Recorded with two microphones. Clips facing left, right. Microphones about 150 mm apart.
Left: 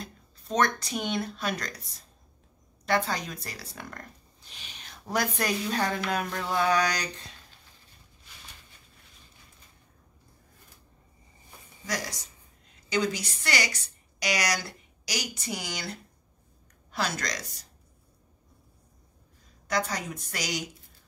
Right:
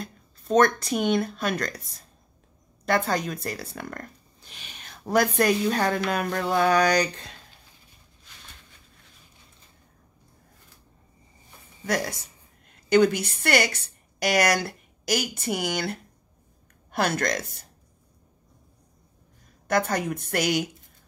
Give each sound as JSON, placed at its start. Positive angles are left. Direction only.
{"t": 0.0, "sound": "speech", "side_deg": -50}
{"t": 2.8, "sound": "speech", "side_deg": -50}
{"t": 11.8, "sound": "a woman's voice", "side_deg": -55}
{"t": 19.7, "sound": "a woman's voice", "side_deg": -55}